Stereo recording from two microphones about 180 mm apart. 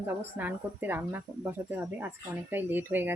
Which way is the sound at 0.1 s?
10° right (ahead or behind).